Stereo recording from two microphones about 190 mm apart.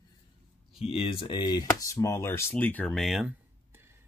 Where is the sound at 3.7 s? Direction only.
10° right (ahead or behind).